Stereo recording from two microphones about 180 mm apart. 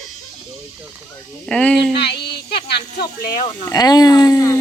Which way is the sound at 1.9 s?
70° left (ahead or behind).